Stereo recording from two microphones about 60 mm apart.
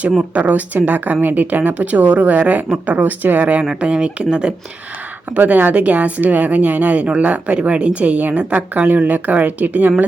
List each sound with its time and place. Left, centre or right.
0.2 s a woman's voice: right
5.3 s a woman's voice: right